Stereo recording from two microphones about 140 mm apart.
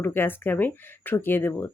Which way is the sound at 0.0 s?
15° left (ahead or behind).